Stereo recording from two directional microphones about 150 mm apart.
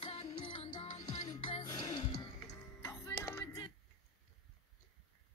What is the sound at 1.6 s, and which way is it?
Music, 20° left (ahead or behind).